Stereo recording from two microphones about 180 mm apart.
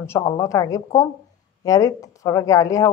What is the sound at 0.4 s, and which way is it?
A woman's voice, 20° left (ahead or behind).